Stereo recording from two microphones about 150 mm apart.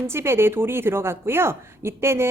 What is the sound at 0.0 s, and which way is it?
A woman's voice, 15° right (ahead or behind).